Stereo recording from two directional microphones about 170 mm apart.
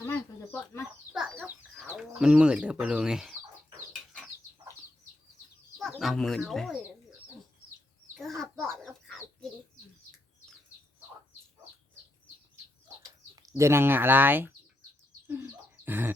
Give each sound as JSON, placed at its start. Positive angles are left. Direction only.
{"t": 0.0, "sound": "chicken", "side_deg": 15}
{"t": 1.1, "sound": "chicken", "side_deg": -5}
{"t": 2.0, "sound": "speech", "side_deg": -5}
{"t": 3.9, "sound": "bird", "side_deg": 5}
{"t": 5.8, "sound": "speech", "side_deg": 0}
{"t": 8.4, "sound": "chicken", "side_deg": 0}
{"t": 13.5, "sound": "speech", "side_deg": -15}
{"t": 15.3, "sound": "bird", "side_deg": -10}